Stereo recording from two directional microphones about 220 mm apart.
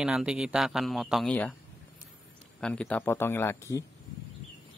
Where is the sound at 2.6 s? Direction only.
5° left (ahead or behind).